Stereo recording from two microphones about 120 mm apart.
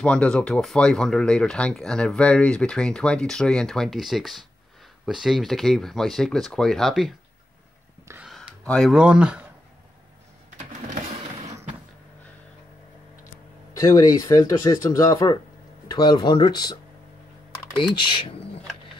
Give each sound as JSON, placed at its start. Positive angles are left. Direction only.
{"t": 0.0, "sound": "speech", "side_deg": 10}
{"t": 8.2, "sound": "a sound", "side_deg": 0}
{"t": 8.6, "sound": "speech", "side_deg": 5}
{"t": 8.9, "sound": "speech", "side_deg": -10}
{"t": 13.7, "sound": "speech", "side_deg": 30}
{"t": 17.7, "sound": "speech", "side_deg": 45}